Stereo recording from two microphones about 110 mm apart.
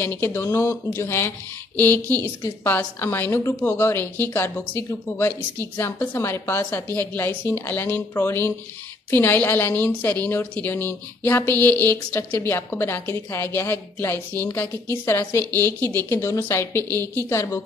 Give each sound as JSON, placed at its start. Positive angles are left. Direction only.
{"t": 0.0, "sound": "a woman's voice", "side_deg": 20}